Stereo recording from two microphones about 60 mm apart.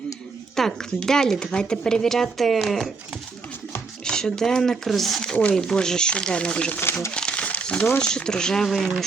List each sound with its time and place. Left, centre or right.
0.6 s speech: centre
4.0 s speech: centre
5.2 s speech: centre
7.1 s crumpling: centre
8.0 s speech: centre